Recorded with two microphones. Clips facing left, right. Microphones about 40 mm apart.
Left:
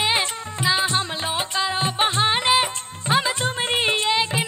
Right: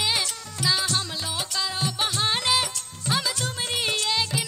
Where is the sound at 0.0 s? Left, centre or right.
Left.